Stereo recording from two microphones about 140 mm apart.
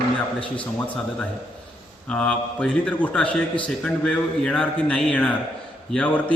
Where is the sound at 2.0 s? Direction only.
5° left (ahead or behind).